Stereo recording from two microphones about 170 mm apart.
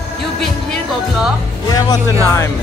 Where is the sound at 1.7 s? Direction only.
20° left (ahead or behind).